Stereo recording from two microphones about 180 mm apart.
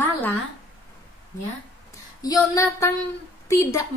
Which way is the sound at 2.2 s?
20° left (ahead or behind).